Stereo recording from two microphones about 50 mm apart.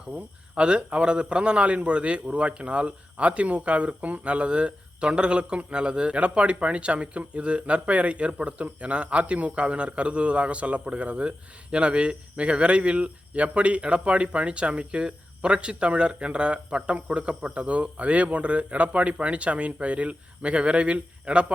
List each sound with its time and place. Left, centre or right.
0.1 s a man's voice: right